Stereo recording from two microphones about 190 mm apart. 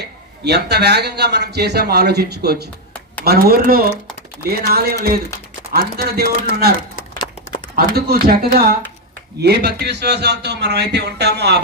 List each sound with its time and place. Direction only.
0.4 s speech: 60° right (ahead or behind)
7.9 s speech: 55° right (ahead or behind)